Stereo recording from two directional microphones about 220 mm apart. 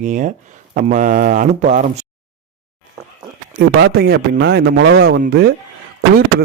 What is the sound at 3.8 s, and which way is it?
A man's voice, 45° right (ahead or behind).